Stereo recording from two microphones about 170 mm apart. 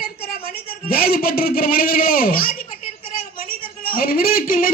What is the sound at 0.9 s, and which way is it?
A man's voice, 60° left (ahead or behind).